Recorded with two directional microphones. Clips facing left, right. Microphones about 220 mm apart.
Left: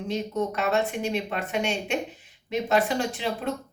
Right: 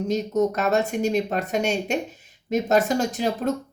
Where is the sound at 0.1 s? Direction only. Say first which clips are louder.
Right 5 dB; 40° right (ahead or behind).